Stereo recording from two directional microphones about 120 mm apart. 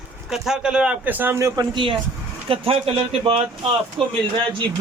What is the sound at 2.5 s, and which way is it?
Speech, 50° right (ahead or behind).